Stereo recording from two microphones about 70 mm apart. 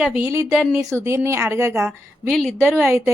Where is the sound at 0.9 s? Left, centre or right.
Right.